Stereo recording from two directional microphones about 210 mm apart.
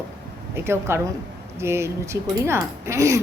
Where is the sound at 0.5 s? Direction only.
10° right (ahead or behind).